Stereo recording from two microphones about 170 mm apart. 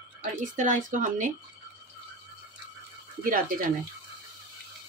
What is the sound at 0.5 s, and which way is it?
Speech, 50° right (ahead or behind).